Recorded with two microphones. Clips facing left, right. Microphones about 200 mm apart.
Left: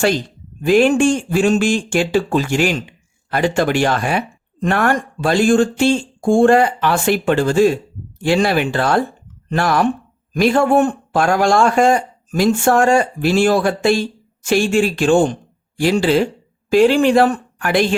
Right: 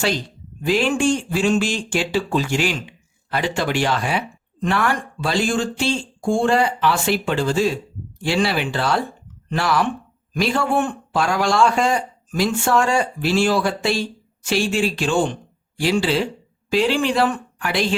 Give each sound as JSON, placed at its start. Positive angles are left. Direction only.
{"t": 0.6, "sound": "speech", "side_deg": 50}